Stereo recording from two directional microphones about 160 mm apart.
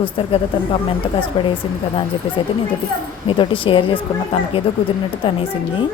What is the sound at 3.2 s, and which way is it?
A woman's voice, 35° left (ahead or behind).